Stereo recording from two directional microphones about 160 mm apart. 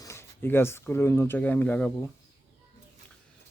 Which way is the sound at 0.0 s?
15° left (ahead or behind).